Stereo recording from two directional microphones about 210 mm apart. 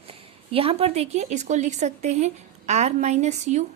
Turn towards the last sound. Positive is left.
turn(degrees=-35)  # may be behind; listen again after turning